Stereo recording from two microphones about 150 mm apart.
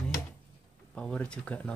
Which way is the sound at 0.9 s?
5° left (ahead or behind).